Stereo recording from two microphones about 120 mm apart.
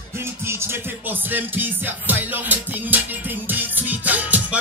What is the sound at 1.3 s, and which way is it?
Music, 15° right (ahead or behind).